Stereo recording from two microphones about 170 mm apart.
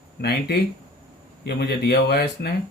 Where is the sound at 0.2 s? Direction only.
70° left (ahead or behind).